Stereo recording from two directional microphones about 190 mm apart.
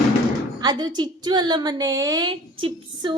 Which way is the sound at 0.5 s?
20° right (ahead or behind).